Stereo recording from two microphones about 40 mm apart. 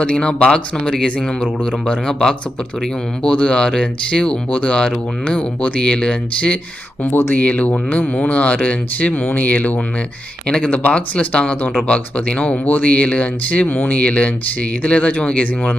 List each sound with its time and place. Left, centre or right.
0.0 s speech: left
5.8 s speech: left
7.1 s speech: left
7.3 s speech: left
11.3 s speech: left